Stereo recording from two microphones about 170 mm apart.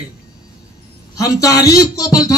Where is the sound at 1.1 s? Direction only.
20° left (ahead or behind).